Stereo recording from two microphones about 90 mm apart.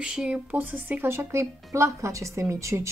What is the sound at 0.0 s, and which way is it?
Speech, 10° right (ahead or behind).